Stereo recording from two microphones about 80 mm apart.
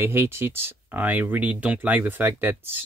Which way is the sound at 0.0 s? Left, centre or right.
Right.